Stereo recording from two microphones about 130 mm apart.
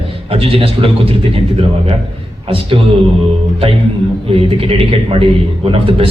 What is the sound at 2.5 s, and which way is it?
Speech, 40° right (ahead or behind).